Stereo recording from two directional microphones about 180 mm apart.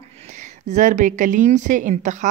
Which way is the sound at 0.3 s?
40° right (ahead or behind).